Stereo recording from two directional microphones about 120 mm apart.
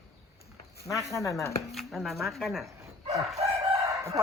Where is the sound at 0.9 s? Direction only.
25° left (ahead or behind).